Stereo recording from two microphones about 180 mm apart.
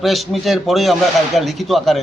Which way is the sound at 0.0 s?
Centre (ahead or behind).